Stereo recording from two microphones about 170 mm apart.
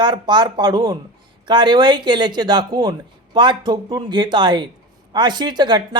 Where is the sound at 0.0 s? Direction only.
25° right (ahead or behind).